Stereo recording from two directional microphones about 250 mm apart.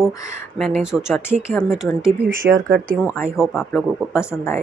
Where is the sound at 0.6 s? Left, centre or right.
Centre.